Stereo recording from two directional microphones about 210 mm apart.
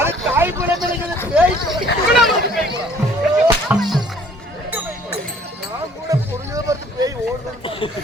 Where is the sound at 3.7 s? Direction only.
Centre (ahead or behind).